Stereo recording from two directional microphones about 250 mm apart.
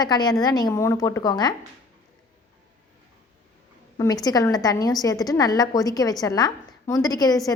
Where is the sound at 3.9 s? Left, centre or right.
Centre.